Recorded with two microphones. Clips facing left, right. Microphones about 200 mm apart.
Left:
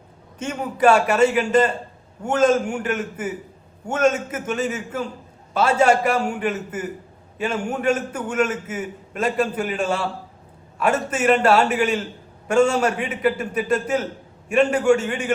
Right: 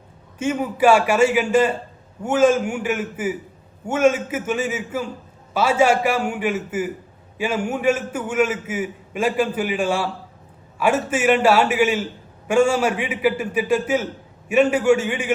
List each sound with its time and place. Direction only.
0.3 s a man's voice: 10° right (ahead or behind)